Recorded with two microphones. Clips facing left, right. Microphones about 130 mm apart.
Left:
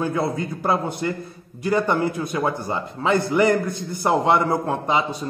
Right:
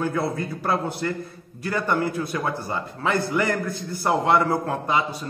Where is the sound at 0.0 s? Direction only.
20° left (ahead or behind).